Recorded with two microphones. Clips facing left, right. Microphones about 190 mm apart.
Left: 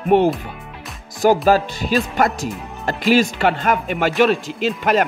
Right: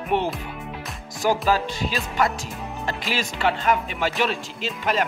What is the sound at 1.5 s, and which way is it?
Speech, 50° left (ahead or behind).